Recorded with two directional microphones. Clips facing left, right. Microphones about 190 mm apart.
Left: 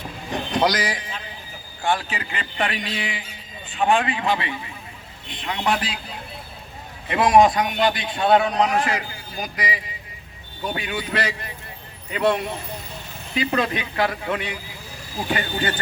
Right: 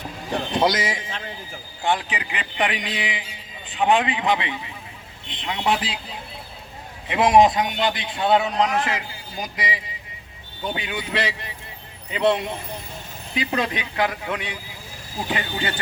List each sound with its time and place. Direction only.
0.3 s a man's voice: 25° right (ahead or behind)
7.1 s a man's voice: 20° right (ahead or behind)